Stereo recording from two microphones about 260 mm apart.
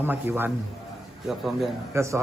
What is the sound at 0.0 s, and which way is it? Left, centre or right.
A man's voice, centre.